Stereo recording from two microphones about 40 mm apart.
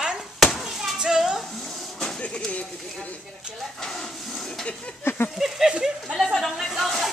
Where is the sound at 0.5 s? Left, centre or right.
Centre.